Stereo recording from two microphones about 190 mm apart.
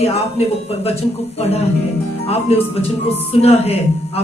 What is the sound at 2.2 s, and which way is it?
A woman's voice, 30° left (ahead or behind).